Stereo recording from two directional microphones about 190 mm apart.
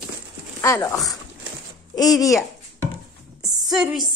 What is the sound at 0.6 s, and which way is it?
Speech, 15° left (ahead or behind).